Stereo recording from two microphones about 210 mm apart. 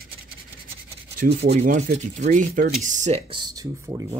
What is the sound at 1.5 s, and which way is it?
Speech, 35° right (ahead or behind).